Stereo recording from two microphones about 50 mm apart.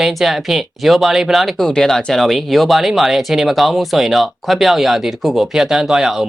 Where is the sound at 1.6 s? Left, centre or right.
Centre.